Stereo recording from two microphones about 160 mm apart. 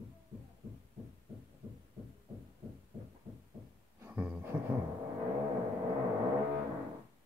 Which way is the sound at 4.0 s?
10° right (ahead or behind).